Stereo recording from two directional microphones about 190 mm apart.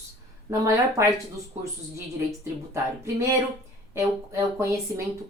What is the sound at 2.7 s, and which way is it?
Speech, 15° right (ahead or behind).